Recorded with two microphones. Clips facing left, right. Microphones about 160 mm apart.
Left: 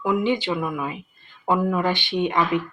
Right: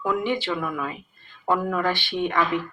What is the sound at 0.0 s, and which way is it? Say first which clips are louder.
Speech: left 3 dB; 15° left (ahead or behind).